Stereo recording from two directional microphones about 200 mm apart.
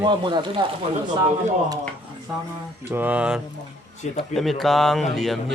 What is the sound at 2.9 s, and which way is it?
Mantra, 10° right (ahead or behind).